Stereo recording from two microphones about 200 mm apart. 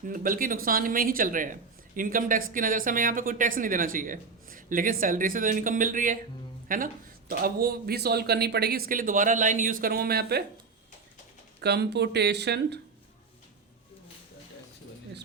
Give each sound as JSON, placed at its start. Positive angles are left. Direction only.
{"t": 0.1, "sound": "speech", "side_deg": -45}
{"t": 11.6, "sound": "speech", "side_deg": -55}